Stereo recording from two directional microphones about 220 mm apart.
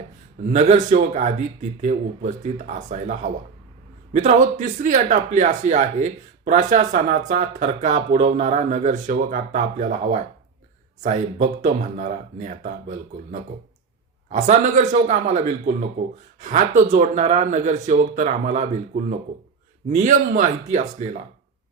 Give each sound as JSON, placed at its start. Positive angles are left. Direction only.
{"t": 0.4, "sound": "speech", "side_deg": -30}
{"t": 4.2, "sound": "speech", "side_deg": -30}